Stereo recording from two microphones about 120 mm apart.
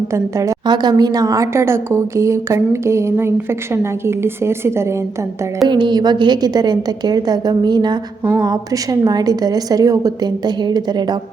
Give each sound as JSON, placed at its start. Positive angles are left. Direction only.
{"t": 0.1, "sound": "a woman's voice", "side_deg": -25}
{"t": 5.6, "sound": "a woman's voice", "side_deg": -40}